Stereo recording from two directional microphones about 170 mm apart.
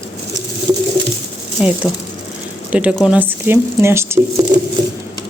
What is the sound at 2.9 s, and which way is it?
Speech, 5° right (ahead or behind).